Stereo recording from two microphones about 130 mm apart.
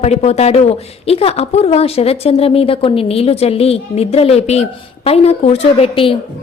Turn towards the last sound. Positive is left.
turn(degrees=45)  # may be behind; listen again after turning